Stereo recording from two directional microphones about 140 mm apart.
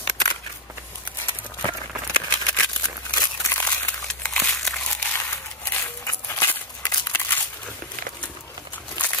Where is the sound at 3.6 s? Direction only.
10° left (ahead or behind).